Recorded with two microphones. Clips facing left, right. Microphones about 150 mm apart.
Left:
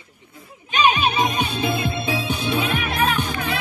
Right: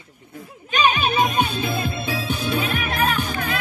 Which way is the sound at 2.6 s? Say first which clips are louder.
Left 1 dB; 45° right (ahead or behind).